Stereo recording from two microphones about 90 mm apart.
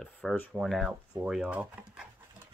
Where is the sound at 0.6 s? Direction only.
Centre (ahead or behind).